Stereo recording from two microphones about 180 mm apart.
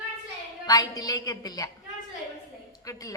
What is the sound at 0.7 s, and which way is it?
A woman's voice, 20° left (ahead or behind).